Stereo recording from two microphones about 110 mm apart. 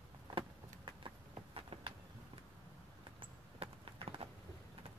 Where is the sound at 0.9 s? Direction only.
50° right (ahead or behind).